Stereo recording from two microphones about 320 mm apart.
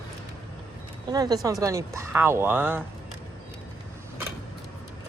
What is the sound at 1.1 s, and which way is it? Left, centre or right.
A woman's voice, centre.